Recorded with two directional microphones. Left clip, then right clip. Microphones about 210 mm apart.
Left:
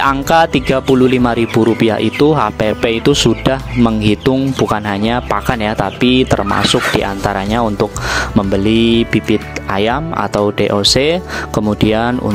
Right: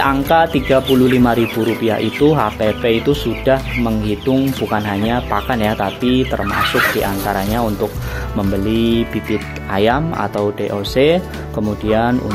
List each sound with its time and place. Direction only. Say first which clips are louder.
0.0 s speech: left 2 dB; 30° left (ahead or behind)